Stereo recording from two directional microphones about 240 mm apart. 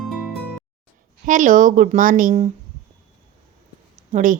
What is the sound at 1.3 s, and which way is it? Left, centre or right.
A woman's voice, right.